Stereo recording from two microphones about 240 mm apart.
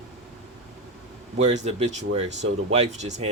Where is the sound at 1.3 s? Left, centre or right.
Right.